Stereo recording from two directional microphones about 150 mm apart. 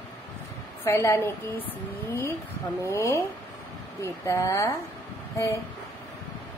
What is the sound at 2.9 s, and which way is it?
A woman's voice, 15° left (ahead or behind).